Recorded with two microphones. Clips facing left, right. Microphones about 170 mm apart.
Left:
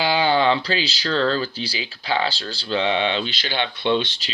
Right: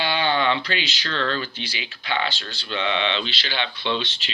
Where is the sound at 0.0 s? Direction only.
30° left (ahead or behind).